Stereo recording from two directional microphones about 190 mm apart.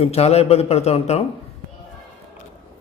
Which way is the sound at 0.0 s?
35° left (ahead or behind).